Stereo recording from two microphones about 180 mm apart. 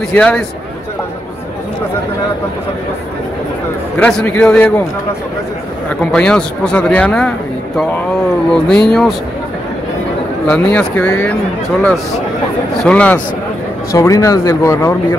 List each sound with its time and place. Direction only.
0.1 s speech: 10° left (ahead or behind)
4.0 s speech: 5° left (ahead or behind)
6.1 s speech: 5° left (ahead or behind)
10.5 s speech: 10° left (ahead or behind)
12.7 s speech: 5° left (ahead or behind)
13.9 s speech: 15° left (ahead or behind)